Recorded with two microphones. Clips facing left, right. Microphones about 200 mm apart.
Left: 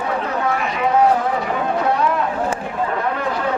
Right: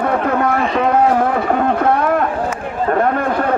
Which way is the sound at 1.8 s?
55° right (ahead or behind).